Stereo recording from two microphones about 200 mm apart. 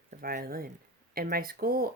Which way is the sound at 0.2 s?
50° right (ahead or behind).